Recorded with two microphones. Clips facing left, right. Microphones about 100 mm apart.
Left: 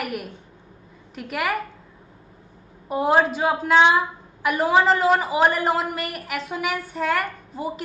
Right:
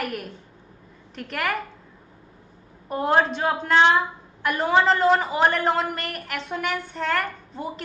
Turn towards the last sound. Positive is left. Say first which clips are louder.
# left 3 dB
turn(degrees=5)  # may be behind; listen again after turning